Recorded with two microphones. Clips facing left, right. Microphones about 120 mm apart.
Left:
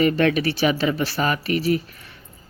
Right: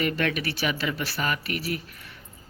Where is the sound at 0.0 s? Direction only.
30° left (ahead or behind).